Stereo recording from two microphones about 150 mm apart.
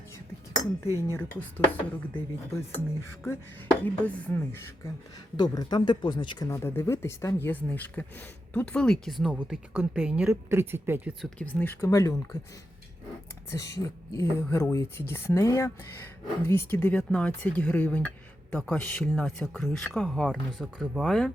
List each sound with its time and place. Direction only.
1.1 s speech: 15° left (ahead or behind)
5.4 s speech: 30° left (ahead or behind); by 11.1 s 15° right (ahead or behind)
11.2 s speech: 10° left (ahead or behind)
13.5 s speech: 20° left (ahead or behind); by 21.3 s 5° left (ahead or behind)